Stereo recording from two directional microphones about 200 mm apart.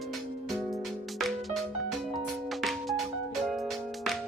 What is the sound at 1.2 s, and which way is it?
Music, centre (ahead or behind).